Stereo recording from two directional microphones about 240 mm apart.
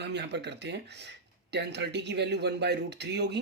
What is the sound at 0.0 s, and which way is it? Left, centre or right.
Speech, right.